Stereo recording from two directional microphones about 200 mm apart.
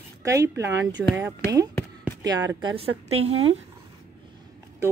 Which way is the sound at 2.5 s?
20° right (ahead or behind).